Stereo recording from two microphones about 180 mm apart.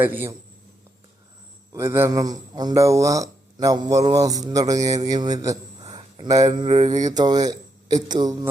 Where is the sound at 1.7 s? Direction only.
15° right (ahead or behind).